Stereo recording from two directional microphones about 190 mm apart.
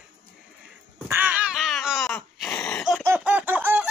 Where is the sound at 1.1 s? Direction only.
10° right (ahead or behind).